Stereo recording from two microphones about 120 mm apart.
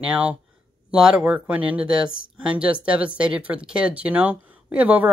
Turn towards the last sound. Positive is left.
turn(degrees=-15)  # may be behind; listen again after turning